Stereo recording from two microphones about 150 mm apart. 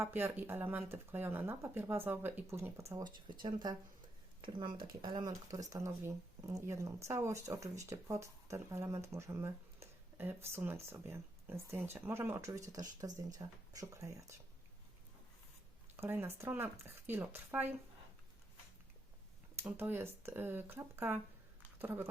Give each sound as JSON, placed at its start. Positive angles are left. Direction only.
{"t": 0.0, "sound": "speech", "side_deg": -10}
{"t": 16.0, "sound": "speech", "side_deg": -15}
{"t": 19.5, "sound": "speech", "side_deg": -15}